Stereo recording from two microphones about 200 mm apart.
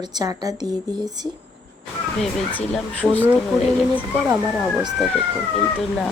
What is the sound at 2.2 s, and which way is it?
Speech, 5° left (ahead or behind).